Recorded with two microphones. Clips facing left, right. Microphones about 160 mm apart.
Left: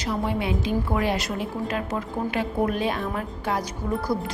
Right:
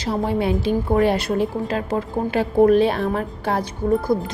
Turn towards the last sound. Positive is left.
turn(degrees=-25)  # may be behind; listen again after turning